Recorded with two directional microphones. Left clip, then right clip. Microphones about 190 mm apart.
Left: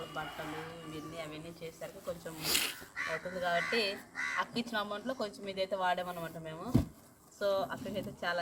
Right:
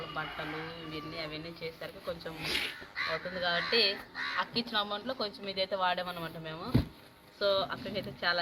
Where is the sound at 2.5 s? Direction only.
30° left (ahead or behind).